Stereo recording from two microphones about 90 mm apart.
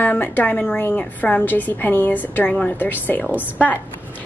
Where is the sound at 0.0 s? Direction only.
20° left (ahead or behind).